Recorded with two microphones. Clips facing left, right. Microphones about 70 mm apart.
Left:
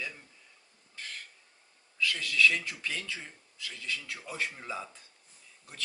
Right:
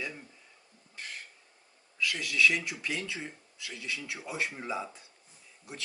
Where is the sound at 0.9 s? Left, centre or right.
Centre.